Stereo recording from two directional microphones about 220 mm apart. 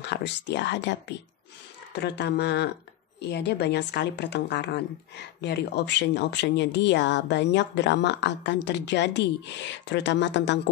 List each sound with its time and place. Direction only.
0.0 s speech: 50° left (ahead or behind)